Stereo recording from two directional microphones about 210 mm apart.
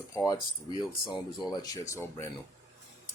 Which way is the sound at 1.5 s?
15° left (ahead or behind).